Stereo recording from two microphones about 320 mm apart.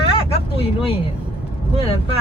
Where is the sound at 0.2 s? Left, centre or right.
Centre.